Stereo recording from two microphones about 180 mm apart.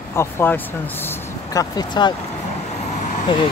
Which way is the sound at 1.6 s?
25° left (ahead or behind).